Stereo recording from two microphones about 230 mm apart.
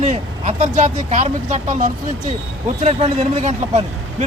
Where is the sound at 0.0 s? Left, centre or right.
Right.